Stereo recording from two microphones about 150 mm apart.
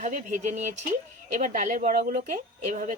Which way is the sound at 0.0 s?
55° right (ahead or behind).